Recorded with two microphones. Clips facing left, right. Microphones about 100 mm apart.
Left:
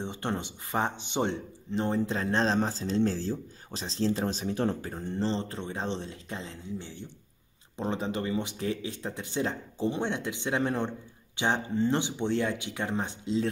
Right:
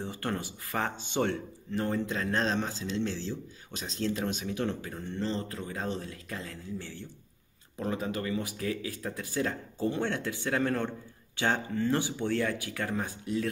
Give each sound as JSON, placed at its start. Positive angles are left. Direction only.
{"t": 0.0, "sound": "speech", "side_deg": 20}